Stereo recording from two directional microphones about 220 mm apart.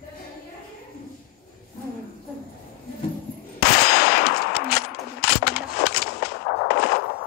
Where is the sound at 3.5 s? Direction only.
45° left (ahead or behind).